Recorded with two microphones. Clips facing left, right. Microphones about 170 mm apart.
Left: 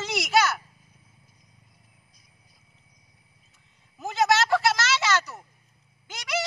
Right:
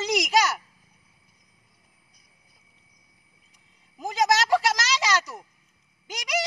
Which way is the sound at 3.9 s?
15° right (ahead or behind).